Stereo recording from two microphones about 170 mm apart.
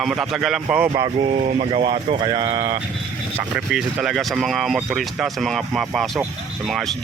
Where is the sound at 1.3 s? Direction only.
35° right (ahead or behind).